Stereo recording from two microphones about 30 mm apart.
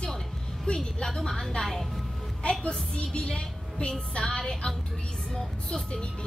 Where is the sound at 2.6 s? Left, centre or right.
Left.